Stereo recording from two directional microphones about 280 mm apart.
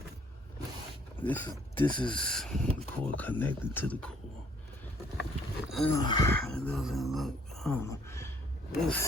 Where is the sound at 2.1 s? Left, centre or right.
Centre.